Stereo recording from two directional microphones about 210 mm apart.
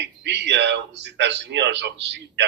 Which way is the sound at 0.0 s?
55° right (ahead or behind).